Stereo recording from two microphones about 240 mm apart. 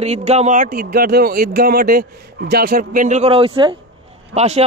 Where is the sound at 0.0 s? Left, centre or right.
Right.